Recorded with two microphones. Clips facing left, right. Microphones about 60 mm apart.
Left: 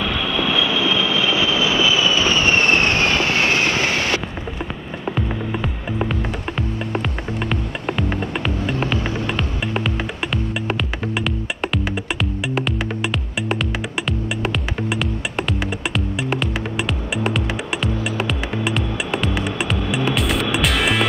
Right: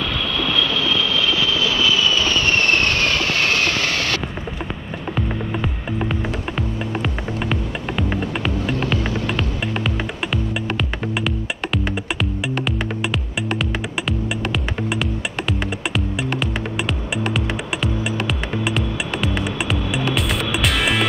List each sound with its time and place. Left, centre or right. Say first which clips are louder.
0.0 s vehicle: left 2 dB; centre
5.1 s music: right 2 dB; centre
6.9 s music: even; centre
8.9 s music: even; centre